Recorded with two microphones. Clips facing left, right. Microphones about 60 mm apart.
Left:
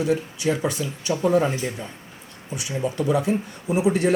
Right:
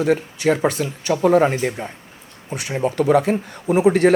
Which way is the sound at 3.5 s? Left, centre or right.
Right.